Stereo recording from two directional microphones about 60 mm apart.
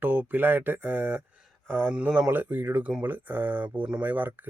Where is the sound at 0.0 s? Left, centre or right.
Right.